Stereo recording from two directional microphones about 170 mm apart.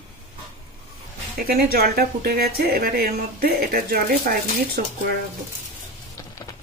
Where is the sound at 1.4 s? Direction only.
65° right (ahead or behind).